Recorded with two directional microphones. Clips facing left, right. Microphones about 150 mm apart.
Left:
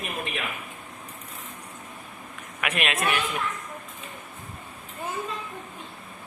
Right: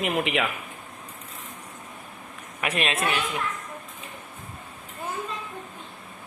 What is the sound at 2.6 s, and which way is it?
Speech, 30° right (ahead or behind).